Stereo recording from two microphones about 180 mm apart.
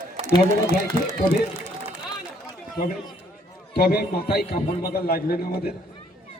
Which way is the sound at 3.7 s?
60° left (ahead or behind).